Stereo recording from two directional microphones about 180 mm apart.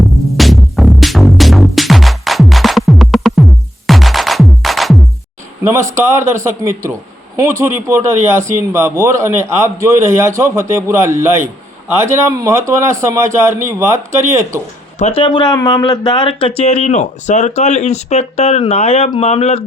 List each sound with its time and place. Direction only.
0.3 s music: centre (ahead or behind)
5.9 s speech: 15° right (ahead or behind)
14.9 s speech: 35° left (ahead or behind)